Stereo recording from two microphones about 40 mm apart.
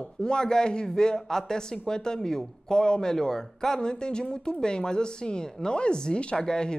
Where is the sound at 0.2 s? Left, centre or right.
Centre.